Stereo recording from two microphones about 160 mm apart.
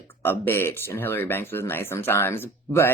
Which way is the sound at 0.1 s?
15° left (ahead or behind).